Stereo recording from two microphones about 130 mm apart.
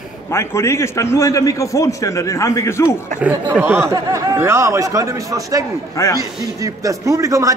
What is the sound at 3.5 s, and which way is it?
Speech, 15° right (ahead or behind).